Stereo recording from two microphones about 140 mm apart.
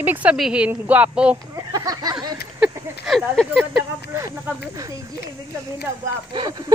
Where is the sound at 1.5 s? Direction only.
25° right (ahead or behind).